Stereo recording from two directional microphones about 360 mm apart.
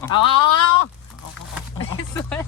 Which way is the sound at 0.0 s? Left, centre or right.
Centre.